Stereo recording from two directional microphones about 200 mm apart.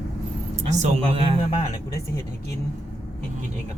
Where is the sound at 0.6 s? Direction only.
35° right (ahead or behind).